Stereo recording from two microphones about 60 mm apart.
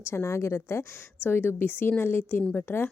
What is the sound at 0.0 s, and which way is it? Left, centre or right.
A woman's voice, left.